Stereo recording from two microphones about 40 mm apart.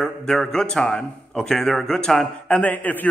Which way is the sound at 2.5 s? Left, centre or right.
Left.